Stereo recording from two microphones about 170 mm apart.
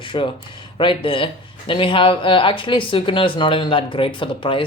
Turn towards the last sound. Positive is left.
turn(degrees=30)  # may be behind; listen again after turning